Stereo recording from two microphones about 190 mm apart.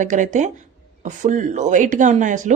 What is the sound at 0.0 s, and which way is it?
Speech, 40° right (ahead or behind).